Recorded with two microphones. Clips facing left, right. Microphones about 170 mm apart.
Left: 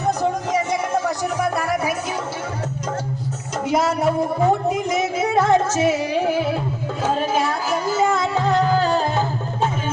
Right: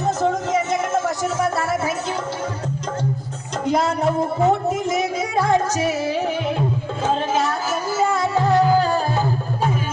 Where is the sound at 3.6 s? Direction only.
5° left (ahead or behind).